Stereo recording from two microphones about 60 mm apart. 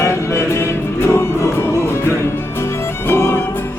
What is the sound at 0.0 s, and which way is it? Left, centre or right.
Music, left.